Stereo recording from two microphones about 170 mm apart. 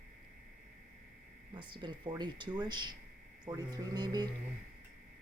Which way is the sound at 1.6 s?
25° right (ahead or behind).